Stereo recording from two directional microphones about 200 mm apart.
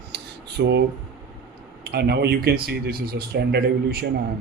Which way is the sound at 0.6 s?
60° right (ahead or behind).